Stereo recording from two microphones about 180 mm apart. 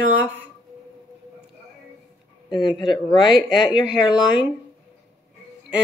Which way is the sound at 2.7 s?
25° left (ahead or behind).